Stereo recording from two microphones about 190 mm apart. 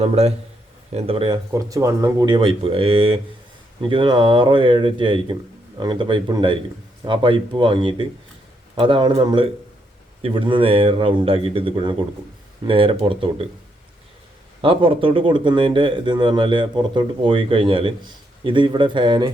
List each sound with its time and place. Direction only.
0.0 s a man's voice: 35° right (ahead or behind)
14.6 s speech: 30° right (ahead or behind)